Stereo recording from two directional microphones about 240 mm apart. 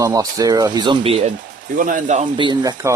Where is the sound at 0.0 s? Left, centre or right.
Centre.